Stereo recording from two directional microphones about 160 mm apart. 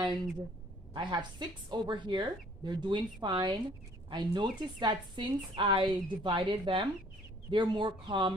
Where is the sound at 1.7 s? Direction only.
25° right (ahead or behind).